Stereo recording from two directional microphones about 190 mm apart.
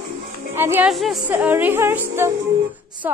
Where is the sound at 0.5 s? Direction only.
10° right (ahead or behind).